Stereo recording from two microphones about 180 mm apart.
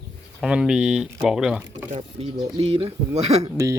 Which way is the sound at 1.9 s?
35° right (ahead or behind).